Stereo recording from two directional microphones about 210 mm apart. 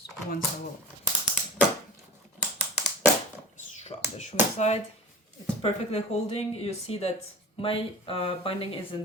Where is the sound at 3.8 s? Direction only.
30° left (ahead or behind).